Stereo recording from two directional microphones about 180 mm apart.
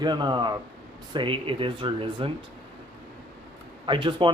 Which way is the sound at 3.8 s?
25° right (ahead or behind).